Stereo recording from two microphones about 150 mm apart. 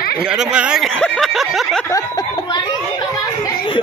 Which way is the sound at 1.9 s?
25° left (ahead or behind).